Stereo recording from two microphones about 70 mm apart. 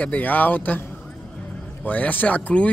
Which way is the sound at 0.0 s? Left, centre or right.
Left.